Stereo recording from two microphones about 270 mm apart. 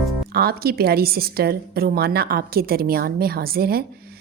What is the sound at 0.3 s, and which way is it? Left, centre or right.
A woman's voice, right.